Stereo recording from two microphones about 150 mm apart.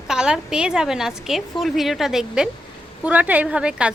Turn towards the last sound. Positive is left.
turn(degrees=-5)  # may be behind; listen again after turning